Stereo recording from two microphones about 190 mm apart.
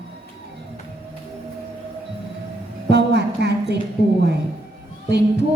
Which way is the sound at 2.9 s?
60° right (ahead or behind).